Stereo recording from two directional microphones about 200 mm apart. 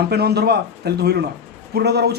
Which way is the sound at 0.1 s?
55° right (ahead or behind).